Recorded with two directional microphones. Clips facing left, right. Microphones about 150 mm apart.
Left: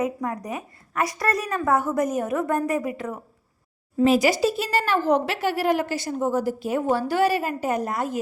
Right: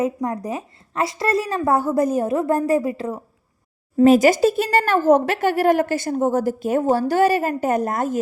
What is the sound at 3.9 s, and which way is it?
Speech, 50° right (ahead or behind).